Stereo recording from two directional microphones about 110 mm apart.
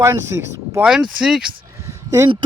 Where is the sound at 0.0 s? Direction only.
25° right (ahead or behind).